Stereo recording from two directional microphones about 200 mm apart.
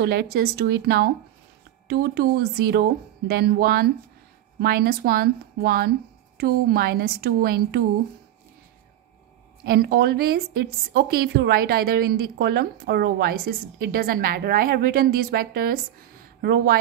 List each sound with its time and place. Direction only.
0.0 s a woman's voice: 50° right (ahead or behind)
9.7 s a woman's voice: 50° right (ahead or behind)